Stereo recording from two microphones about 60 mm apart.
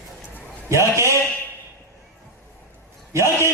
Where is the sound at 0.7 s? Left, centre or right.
Right.